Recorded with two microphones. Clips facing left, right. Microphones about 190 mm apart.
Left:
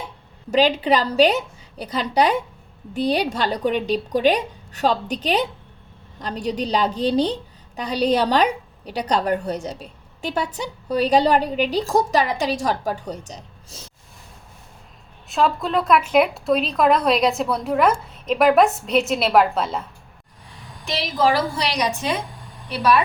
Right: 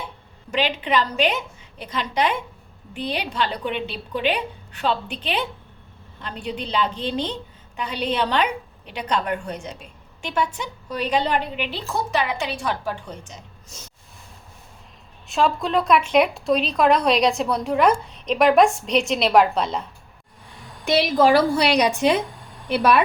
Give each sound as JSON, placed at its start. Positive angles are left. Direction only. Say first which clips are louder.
{"t": 0.5, "sound": "a woman's voice", "louder": "left 5 dB", "side_deg": 35}
{"t": 15.3, "sound": "a woman's voice", "louder": "even", "side_deg": 0}
{"t": 20.8, "sound": "a woman's voice", "louder": "right 4 dB", "side_deg": -55}